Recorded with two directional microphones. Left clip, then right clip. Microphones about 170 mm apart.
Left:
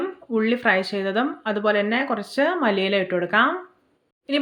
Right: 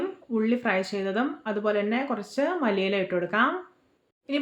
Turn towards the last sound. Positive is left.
turn(degrees=20)  # may be behind; listen again after turning